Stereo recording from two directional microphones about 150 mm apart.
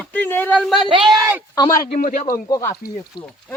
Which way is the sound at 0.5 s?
Centre (ahead or behind).